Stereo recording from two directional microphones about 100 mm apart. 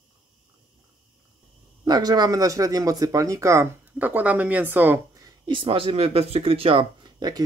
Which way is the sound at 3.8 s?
15° right (ahead or behind).